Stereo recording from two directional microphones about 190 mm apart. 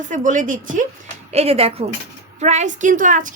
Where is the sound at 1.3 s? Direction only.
30° right (ahead or behind).